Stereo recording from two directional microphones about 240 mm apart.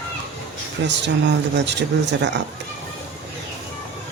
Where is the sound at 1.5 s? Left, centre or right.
Right.